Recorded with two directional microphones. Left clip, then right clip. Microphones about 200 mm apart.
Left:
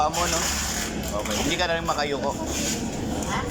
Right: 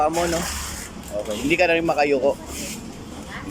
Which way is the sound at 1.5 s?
45° right (ahead or behind).